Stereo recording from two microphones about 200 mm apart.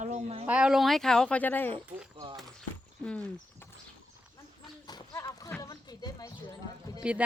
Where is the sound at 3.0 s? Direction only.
10° left (ahead or behind).